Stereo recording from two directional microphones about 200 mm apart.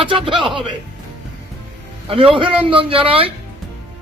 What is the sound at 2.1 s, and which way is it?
A man's voice, 25° right (ahead or behind).